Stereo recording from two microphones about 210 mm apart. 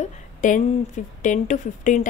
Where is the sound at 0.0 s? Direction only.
35° left (ahead or behind).